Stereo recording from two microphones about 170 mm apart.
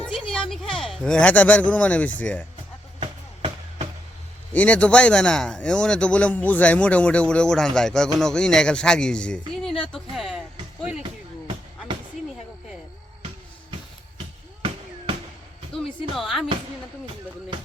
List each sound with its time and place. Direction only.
0.0 s a sound: 5° left (ahead or behind)
0.5 s speech: centre (ahead or behind)
3.0 s music: 35° right (ahead or behind)
4.5 s speech: 10° left (ahead or behind)
16.1 s music: centre (ahead or behind)